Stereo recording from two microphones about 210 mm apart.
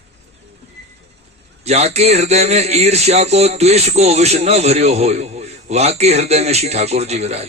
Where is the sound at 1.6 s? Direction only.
30° right (ahead or behind).